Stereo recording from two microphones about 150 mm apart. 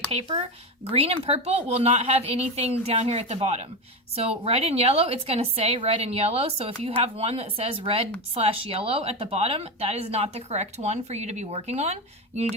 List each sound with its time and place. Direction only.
0.1 s speech: 45° right (ahead or behind)